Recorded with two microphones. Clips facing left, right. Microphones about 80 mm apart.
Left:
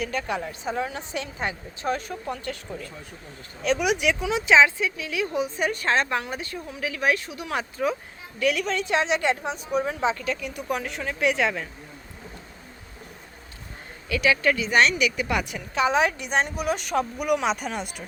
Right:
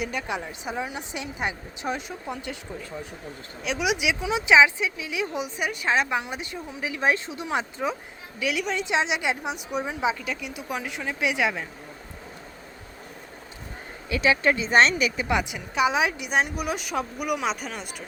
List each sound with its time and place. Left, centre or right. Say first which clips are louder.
0.0 s a woman's voice: left 2 dB; centre
3.6 s a woman's voice: left 3 dB; centre
5.5 s speech: right 1 dB; centre
8.4 s a woman's voice: left 3 dB; centre
14.1 s a woman's voice: even; right; by 18.0 s centre